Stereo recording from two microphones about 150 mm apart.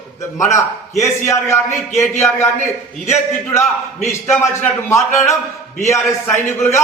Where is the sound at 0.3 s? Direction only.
20° left (ahead or behind).